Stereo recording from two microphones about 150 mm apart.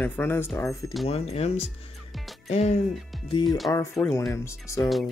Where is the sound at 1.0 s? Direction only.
45° left (ahead or behind).